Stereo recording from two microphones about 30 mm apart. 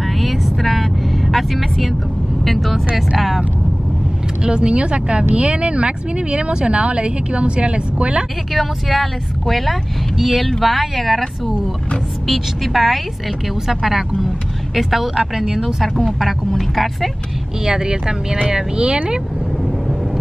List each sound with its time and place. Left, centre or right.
0.0 s vehicle: centre
2.4 s a woman's voice: centre
4.4 s speech: right
8.8 s a woman's voice: centre
17.6 s speech: right